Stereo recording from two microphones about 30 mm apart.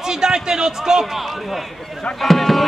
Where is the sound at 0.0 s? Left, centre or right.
Right.